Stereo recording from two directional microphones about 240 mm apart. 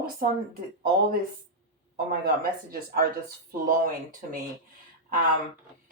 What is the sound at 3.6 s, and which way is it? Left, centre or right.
Speech, right.